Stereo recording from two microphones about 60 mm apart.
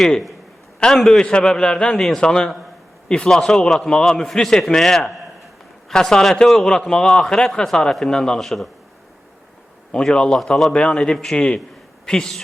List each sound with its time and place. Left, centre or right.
0.8 s a man's voice: centre
9.9 s a man's voice: centre